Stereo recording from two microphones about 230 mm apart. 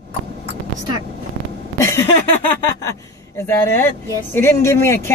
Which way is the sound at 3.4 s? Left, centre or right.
Centre.